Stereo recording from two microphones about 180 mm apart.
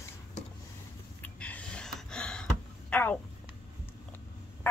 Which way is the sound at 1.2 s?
10° left (ahead or behind).